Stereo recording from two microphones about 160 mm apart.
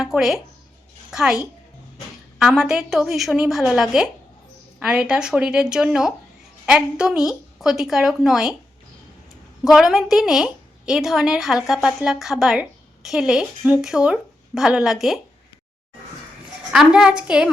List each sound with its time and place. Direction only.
0.0 s a woman's voice: centre (ahead or behind)
9.6 s a woman's voice: centre (ahead or behind)
16.7 s a woman's voice: 5° right (ahead or behind)